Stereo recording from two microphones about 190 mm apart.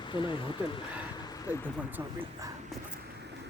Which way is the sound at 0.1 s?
25° left (ahead or behind).